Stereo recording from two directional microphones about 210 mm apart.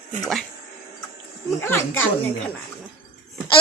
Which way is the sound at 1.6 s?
10° left (ahead or behind).